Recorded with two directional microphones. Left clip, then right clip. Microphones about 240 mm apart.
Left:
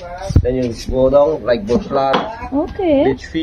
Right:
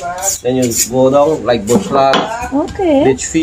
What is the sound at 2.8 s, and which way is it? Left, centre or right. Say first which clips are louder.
Speech: right 2 dB; left.